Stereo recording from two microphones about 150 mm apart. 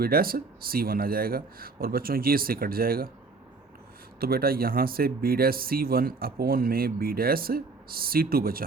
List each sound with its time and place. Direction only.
0.0 s speech: 80° right
4.2 s speech: 85° right